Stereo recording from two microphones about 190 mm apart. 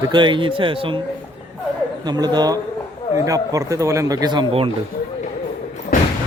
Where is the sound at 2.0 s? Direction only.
20° right (ahead or behind).